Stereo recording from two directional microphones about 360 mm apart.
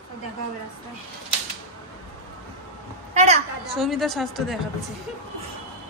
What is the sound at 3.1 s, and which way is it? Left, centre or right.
Speech, centre.